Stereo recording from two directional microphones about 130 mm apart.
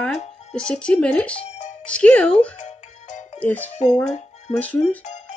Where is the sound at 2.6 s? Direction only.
70° left (ahead or behind).